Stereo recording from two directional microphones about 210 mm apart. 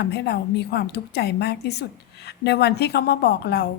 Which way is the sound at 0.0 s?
50° left (ahead or behind).